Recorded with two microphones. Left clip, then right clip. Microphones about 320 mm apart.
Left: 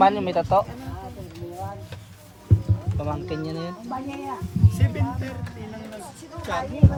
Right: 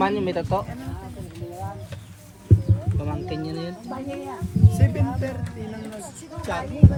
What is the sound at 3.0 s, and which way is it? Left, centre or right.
Speech, centre.